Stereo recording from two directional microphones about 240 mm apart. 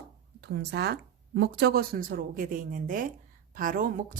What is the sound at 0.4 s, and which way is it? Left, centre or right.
A woman's voice, right.